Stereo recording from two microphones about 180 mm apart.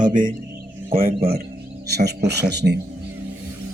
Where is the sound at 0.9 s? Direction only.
55° right (ahead or behind).